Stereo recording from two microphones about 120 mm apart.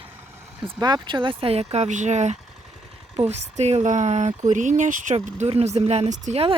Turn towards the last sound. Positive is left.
turn(degrees=-70)  # may be behind; listen again after turning